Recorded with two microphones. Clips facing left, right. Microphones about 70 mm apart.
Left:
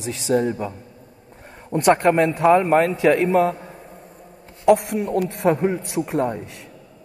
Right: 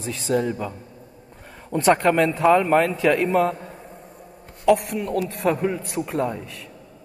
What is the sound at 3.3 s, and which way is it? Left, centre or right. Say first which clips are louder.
Speech: left 2 dB; left.